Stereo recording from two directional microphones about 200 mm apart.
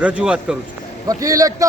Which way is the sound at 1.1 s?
15° right (ahead or behind).